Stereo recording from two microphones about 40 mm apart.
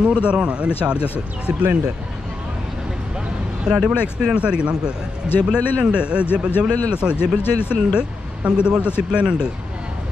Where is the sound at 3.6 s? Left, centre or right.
Right.